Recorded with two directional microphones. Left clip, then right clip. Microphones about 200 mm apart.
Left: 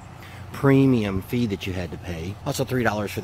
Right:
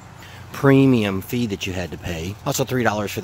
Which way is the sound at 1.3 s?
15° right (ahead or behind).